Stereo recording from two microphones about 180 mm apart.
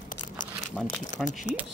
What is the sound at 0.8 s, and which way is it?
Speech, 5° left (ahead or behind).